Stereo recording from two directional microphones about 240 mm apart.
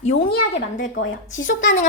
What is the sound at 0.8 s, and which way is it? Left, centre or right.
Speech, left.